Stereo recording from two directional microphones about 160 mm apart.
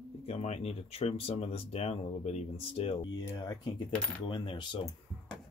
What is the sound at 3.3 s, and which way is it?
Speech, 25° left (ahead or behind).